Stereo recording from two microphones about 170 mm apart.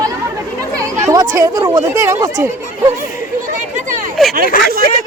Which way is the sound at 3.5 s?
45° right (ahead or behind).